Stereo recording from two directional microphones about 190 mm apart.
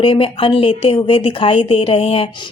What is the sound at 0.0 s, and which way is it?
Speech, 30° left (ahead or behind).